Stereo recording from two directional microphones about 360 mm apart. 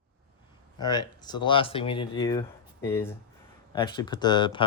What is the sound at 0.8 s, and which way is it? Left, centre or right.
Speech, centre.